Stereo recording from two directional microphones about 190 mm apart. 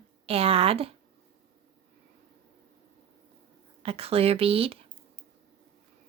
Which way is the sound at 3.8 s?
30° right (ahead or behind).